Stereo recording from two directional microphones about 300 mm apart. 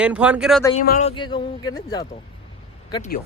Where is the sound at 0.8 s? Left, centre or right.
Left.